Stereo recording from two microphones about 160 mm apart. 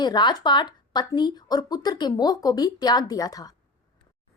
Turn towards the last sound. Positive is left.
turn(degrees=25)  # may be behind; listen again after turning